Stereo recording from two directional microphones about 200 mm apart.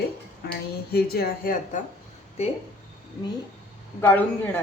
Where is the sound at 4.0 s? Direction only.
10° left (ahead or behind).